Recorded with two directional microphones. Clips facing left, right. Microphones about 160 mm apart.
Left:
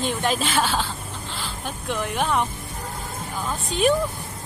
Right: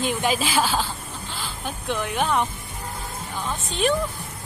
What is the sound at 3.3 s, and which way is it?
Music, 5° left (ahead or behind).